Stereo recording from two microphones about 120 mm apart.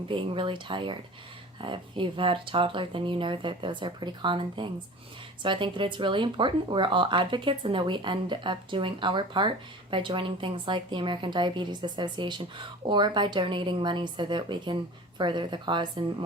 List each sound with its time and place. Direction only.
0.1 s a woman's voice: 45° right (ahead or behind)